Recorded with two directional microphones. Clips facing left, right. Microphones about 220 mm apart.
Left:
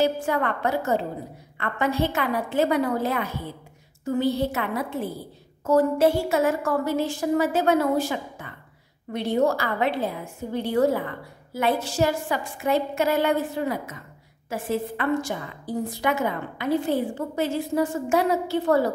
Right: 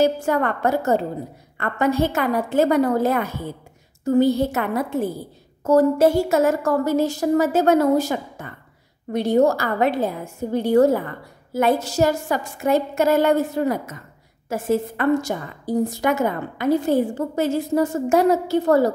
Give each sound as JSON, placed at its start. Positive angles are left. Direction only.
{"t": 0.0, "sound": "a woman's voice", "side_deg": -45}